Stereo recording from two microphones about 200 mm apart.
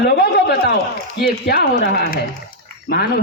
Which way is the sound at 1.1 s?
50° left (ahead or behind).